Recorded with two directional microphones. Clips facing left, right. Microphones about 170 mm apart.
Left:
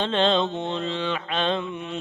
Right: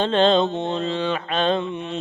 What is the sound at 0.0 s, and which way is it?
Mantra, 40° right (ahead or behind).